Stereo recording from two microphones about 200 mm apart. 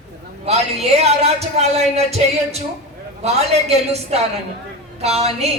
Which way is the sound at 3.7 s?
30° right (ahead or behind).